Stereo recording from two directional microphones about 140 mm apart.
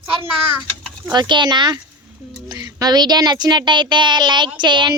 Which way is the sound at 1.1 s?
30° right (ahead or behind).